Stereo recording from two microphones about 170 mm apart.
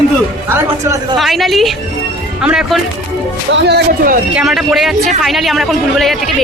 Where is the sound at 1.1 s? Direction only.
Centre (ahead or behind).